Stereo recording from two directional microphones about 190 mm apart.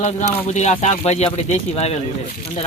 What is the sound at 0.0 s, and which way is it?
Speech, 40° left (ahead or behind).